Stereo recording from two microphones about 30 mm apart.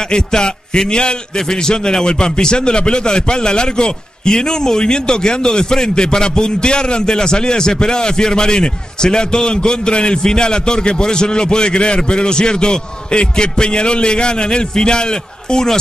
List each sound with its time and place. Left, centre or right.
0.1 s a man's voice: left